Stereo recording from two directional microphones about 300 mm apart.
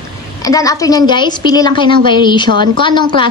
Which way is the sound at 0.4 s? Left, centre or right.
Centre.